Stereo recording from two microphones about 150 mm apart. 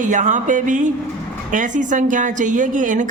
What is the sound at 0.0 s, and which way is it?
Speech, 55° right (ahead or behind).